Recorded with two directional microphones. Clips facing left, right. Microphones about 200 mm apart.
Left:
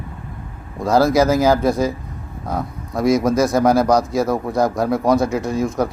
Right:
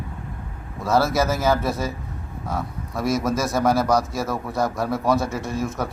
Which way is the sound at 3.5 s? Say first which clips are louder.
Left 2 dB; 20° left (ahead or behind).